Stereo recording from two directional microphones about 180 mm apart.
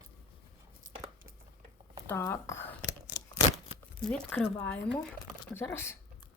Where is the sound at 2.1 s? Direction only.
15° left (ahead or behind).